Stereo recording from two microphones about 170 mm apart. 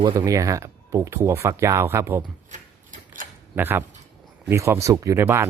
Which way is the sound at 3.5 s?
10° right (ahead or behind).